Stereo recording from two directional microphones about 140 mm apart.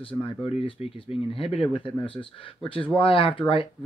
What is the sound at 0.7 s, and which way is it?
Speech, 40° left (ahead or behind).